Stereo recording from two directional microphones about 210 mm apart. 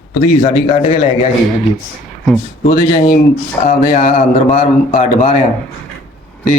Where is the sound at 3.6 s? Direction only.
35° left (ahead or behind).